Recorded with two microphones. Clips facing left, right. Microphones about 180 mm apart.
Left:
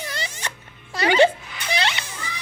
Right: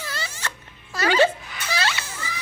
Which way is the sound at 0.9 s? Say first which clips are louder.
Left 2 dB; 25° left (ahead or behind).